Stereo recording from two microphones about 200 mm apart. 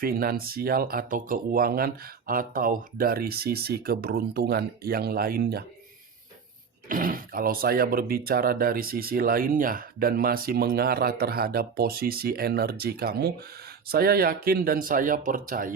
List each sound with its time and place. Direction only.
0.0 s speech: 50° right (ahead or behind)
6.8 s speech: 45° right (ahead or behind)